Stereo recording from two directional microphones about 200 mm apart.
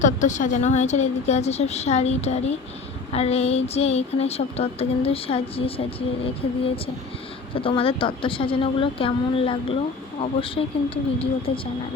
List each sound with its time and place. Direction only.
0.0 s speech: 35° left (ahead or behind)
7.5 s speech: 25° left (ahead or behind)